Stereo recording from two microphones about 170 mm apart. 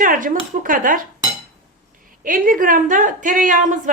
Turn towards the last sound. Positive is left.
turn(degrees=-50)  # may be behind; listen again after turning